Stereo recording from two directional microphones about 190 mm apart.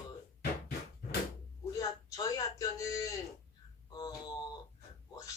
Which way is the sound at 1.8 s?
20° left (ahead or behind).